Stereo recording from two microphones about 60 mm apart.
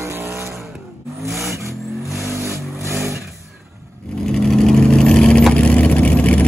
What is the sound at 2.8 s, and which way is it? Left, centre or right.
Vehicle, right.